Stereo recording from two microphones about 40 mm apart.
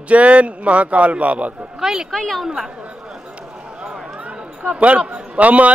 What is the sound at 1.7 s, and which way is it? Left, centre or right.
Speech, centre.